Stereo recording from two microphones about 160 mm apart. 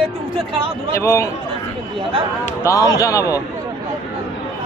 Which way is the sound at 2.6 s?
20° left (ahead or behind).